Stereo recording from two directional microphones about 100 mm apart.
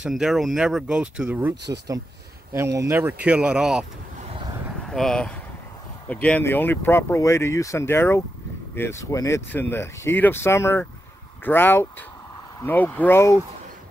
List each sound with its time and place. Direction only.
0.0 s speech: 5° right (ahead or behind)
2.5 s speech: 30° right (ahead or behind); by 3.8 s 10° right (ahead or behind)
4.8 s speech: 5° left (ahead or behind); by 9.0 s 20° left (ahead or behind)
9.0 s speech: 35° left (ahead or behind)
9.5 s speech: 20° left (ahead or behind)